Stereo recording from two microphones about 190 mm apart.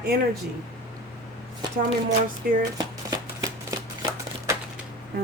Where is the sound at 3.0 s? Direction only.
20° right (ahead or behind).